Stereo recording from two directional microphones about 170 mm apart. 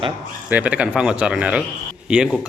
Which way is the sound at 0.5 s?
10° right (ahead or behind).